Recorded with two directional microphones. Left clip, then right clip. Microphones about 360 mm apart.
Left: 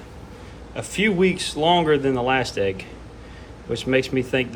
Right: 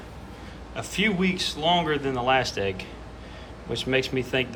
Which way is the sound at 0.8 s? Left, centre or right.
Centre.